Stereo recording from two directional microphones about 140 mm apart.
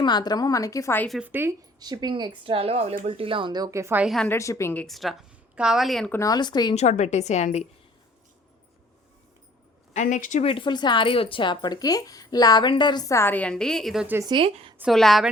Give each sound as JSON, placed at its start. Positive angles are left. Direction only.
{"t": 0.0, "sound": "speech", "side_deg": 30}
{"t": 1.2, "sound": "a woman's voice", "side_deg": -15}
{"t": 1.8, "sound": "speech", "side_deg": -30}
{"t": 4.0, "sound": "a woman's voice", "side_deg": 0}
{"t": 4.3, "sound": "speech", "side_deg": 20}
{"t": 4.9, "sound": "a woman's voice", "side_deg": 0}
{"t": 6.1, "sound": "speech", "side_deg": 25}
{"t": 6.7, "sound": "a woman's voice", "side_deg": 55}
{"t": 9.9, "sound": "a woman's voice", "side_deg": 60}
{"t": 10.4, "sound": "speech", "side_deg": 40}
{"t": 14.3, "sound": "speech", "side_deg": -40}
{"t": 14.8, "sound": "a woman's voice", "side_deg": 0}